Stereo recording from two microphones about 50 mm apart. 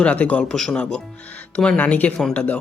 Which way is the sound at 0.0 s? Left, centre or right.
Left.